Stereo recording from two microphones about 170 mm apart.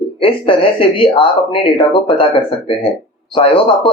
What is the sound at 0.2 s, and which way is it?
Speech, 30° left (ahead or behind).